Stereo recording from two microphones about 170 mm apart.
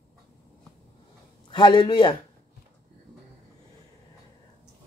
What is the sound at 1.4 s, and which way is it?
Speech, 25° left (ahead or behind).